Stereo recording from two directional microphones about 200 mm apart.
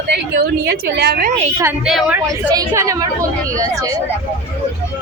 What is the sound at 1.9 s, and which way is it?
Speech, centre (ahead or behind).